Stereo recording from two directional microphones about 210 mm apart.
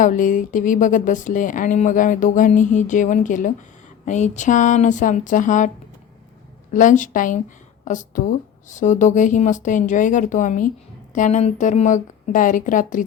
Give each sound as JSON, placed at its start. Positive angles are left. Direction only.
{"t": 0.0, "sound": "speech", "side_deg": 40}
{"t": 6.7, "sound": "speech", "side_deg": 35}